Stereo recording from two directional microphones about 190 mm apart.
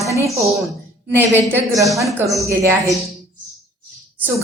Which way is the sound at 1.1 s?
10° right (ahead or behind).